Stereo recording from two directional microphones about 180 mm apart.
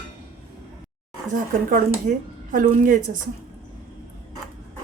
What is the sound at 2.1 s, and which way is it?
Speech, 45° right (ahead or behind).